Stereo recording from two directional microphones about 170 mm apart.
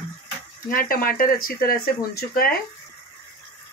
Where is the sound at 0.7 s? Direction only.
55° left (ahead or behind).